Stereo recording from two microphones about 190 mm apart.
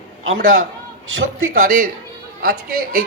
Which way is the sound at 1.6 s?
45° right (ahead or behind).